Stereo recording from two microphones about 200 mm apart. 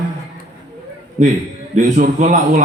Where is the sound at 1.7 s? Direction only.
40° right (ahead or behind).